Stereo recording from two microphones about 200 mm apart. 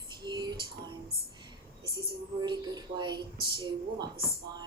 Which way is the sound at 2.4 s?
20° right (ahead or behind).